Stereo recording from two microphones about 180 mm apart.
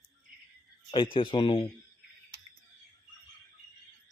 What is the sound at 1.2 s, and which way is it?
Speech, 30° left (ahead or behind).